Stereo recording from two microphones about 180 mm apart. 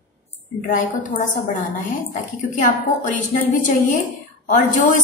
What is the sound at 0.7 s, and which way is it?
A woman's voice, 45° left (ahead or behind).